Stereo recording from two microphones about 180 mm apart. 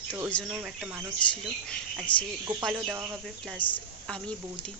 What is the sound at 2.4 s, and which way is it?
Speech, 15° right (ahead or behind).